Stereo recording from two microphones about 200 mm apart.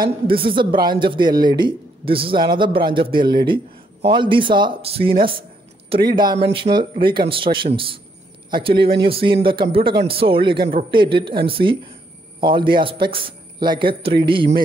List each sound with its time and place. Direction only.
0.3 s a man's voice: 25° right (ahead or behind)
10.6 s a man's voice: 45° right (ahead or behind)
10.9 s a man's voice: 25° right (ahead or behind)